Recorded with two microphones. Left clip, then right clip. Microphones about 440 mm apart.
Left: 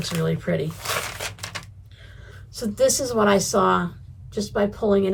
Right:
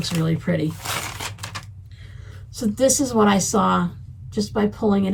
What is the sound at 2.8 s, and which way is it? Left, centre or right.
Speech, left.